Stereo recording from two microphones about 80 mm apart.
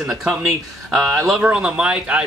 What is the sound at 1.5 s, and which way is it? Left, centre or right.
Speech, centre.